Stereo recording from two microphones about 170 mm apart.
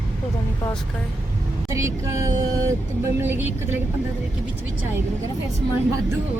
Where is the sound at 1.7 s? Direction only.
15° right (ahead or behind).